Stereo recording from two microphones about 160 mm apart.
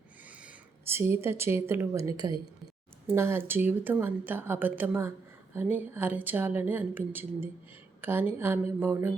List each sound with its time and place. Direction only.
0.3 s speech: 10° right (ahead or behind)